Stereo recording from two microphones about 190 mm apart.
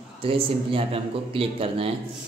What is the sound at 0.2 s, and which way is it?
Speech, 30° right (ahead or behind).